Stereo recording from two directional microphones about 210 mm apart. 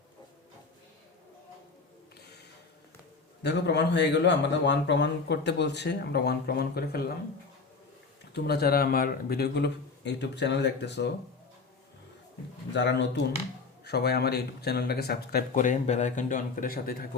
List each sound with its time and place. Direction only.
3.4 s speech: 55° left (ahead or behind)
8.3 s speech: 50° left (ahead or behind)
12.7 s speech: 55° left (ahead or behind)